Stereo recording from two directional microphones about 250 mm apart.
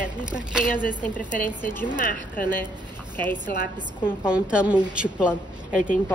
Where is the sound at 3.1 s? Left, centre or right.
Centre.